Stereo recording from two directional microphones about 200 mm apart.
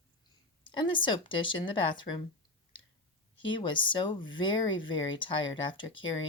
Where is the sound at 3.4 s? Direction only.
25° left (ahead or behind).